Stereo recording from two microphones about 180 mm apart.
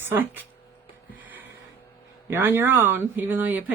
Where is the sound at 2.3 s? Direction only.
10° right (ahead or behind).